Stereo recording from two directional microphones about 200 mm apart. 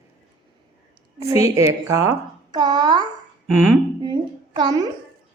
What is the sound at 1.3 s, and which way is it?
A woman's voice, 15° right (ahead or behind).